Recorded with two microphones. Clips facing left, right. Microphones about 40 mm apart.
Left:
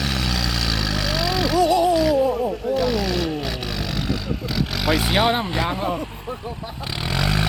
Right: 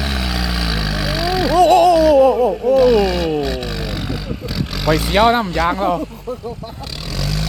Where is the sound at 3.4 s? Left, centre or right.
Centre.